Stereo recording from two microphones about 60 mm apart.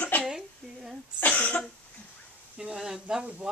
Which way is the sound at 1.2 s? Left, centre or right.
Left.